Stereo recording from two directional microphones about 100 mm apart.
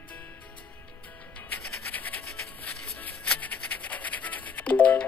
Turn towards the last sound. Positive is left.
turn(degrees=15)  # may be behind; listen again after turning